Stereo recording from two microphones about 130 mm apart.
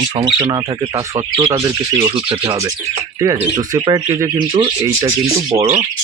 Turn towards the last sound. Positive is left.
turn(degrees=-25)  # may be behind; listen again after turning